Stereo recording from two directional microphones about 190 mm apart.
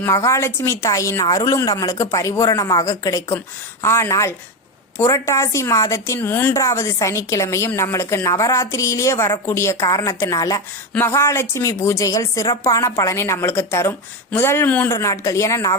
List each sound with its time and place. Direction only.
0.0 s a woman's voice: 15° left (ahead or behind)